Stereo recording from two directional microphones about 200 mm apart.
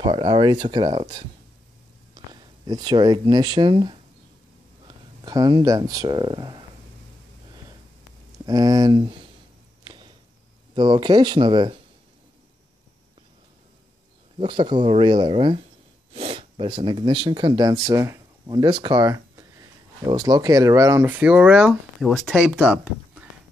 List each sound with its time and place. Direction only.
0.0 s speech: 25° right (ahead or behind)
8.5 s speech: 20° right (ahead or behind)
9.8 s a sound: 20° right (ahead or behind)
10.7 s speech: 20° right (ahead or behind)
14.4 s speech: 25° right (ahead or behind); by 23.2 s 5° right (ahead or behind)